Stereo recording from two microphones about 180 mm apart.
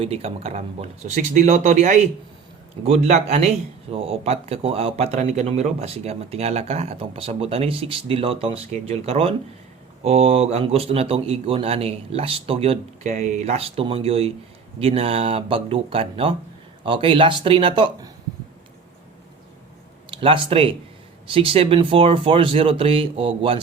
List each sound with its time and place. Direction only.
0.0 s speech: 35° right (ahead or behind)
20.1 s speech: 30° right (ahead or behind)